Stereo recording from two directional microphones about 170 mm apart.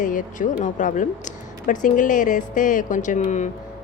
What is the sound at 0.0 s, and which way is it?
A woman's voice, 50° left (ahead or behind).